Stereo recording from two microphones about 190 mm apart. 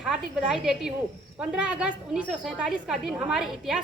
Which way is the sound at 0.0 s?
5° right (ahead or behind).